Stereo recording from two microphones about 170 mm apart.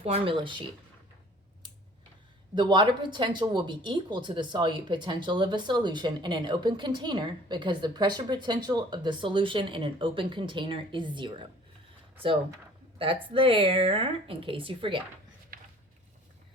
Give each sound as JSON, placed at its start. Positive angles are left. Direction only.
{"t": 0.0, "sound": "speech", "side_deg": -30}
{"t": 2.6, "sound": "speech", "side_deg": -25}
{"t": 13.3, "sound": "speech", "side_deg": -30}
{"t": 15.5, "sound": "a sound", "side_deg": -55}